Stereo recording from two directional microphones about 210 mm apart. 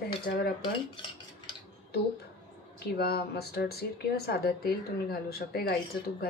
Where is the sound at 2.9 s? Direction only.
50° left (ahead or behind).